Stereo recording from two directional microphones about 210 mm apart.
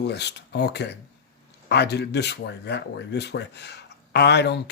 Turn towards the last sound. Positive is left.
turn(degrees=50)  # may be behind; listen again after turning